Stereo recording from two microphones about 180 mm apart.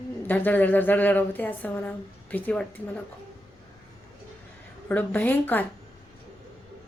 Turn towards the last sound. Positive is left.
turn(degrees=10)  # may be behind; listen again after turning